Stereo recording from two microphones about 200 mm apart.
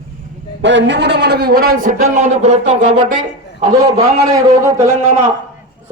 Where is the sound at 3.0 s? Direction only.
20° right (ahead or behind).